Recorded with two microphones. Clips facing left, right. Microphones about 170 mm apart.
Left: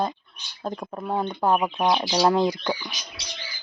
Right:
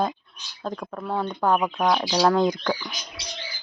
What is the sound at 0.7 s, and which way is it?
Speech, 20° left (ahead or behind).